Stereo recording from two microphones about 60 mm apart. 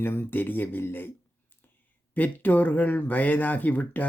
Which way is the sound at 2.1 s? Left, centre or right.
Left.